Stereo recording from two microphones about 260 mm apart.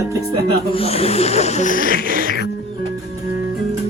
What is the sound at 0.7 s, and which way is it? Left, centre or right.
Snake, left.